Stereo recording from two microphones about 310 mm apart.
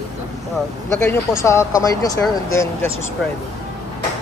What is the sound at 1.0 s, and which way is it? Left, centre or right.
Speech, centre.